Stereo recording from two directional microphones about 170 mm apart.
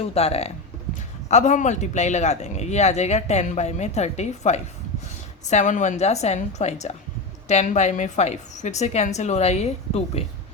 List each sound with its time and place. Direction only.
0.1 s speech: 35° left (ahead or behind)